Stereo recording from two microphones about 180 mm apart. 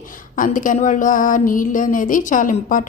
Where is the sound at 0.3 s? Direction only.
45° left (ahead or behind).